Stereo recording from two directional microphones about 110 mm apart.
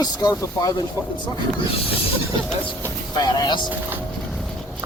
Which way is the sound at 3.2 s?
40° left (ahead or behind).